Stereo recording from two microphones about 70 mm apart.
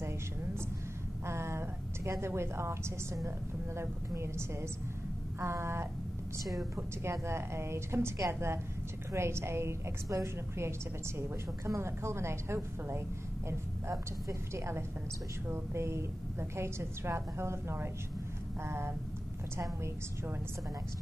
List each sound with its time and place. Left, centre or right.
1.2 s a woman's voice: right
6.4 s a woman's voice: centre
7.1 s a woman's voice: right